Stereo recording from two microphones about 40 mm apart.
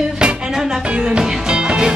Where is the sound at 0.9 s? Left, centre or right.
Right.